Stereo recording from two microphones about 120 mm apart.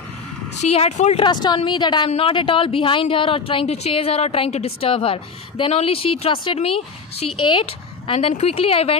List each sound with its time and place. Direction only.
0.6 s speech: 70° left (ahead or behind)
1.2 s a woman's voice: 35° left (ahead or behind)
2.0 s a woman's voice: 50° left (ahead or behind)
8.1 s a woman's voice: 60° left (ahead or behind)